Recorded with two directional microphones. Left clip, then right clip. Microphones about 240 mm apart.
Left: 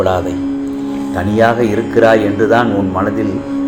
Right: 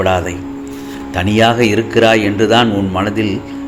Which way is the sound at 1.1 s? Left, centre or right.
Right.